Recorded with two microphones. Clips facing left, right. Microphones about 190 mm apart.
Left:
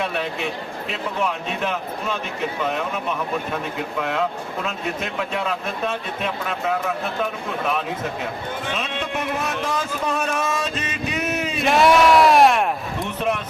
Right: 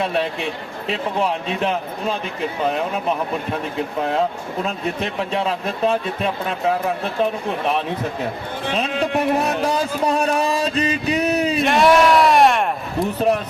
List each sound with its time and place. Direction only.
0.0 s speech: 30° right (ahead or behind)
4.6 s speech: 35° right (ahead or behind)
11.5 s speech: centre (ahead or behind)
13.1 s speech: 35° right (ahead or behind)